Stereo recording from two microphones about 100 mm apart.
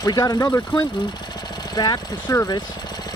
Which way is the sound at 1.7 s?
40° left (ahead or behind).